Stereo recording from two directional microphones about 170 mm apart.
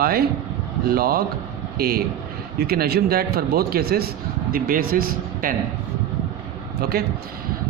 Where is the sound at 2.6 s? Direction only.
65° right (ahead or behind).